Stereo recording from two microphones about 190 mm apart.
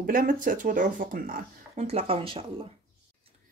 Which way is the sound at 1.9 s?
30° right (ahead or behind).